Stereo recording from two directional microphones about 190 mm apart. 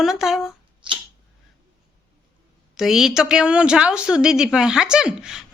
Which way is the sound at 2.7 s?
Centre (ahead or behind).